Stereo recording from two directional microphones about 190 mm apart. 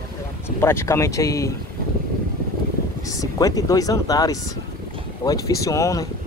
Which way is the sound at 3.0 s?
20° left (ahead or behind).